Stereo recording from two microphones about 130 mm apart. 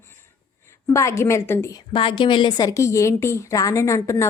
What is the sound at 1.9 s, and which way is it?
Speech, 40° left (ahead or behind).